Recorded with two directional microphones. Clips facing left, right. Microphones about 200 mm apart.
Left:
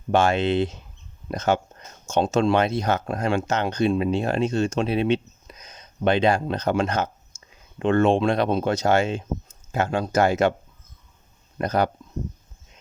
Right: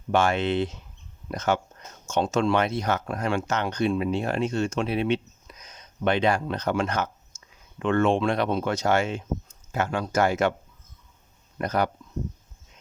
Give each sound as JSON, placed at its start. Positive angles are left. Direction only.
{"t": 0.1, "sound": "speech", "side_deg": 30}
{"t": 11.5, "sound": "speech", "side_deg": 30}